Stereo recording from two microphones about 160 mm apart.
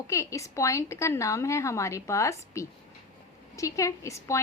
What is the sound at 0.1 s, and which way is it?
A woman's voice, 20° left (ahead or behind).